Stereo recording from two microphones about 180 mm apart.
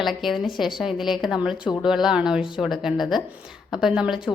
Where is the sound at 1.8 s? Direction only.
5° right (ahead or behind).